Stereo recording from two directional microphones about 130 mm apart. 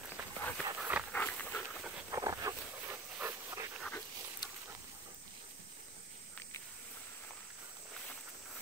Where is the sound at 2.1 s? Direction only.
25° right (ahead or behind).